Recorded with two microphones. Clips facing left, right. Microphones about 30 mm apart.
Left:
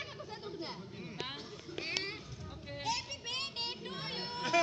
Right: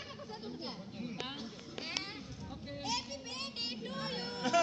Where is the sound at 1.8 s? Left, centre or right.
Left.